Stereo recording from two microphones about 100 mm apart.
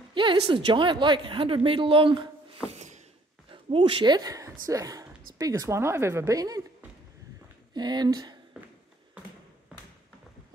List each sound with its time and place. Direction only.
0.1 s a woman's voice: 55° right (ahead or behind)
3.4 s a woman's voice: 60° right (ahead or behind); by 6.6 s 35° right (ahead or behind)
7.7 s speech: 45° right (ahead or behind)